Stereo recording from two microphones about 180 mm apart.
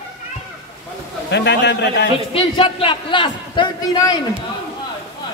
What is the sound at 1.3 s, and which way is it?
Speech, 75° left (ahead or behind).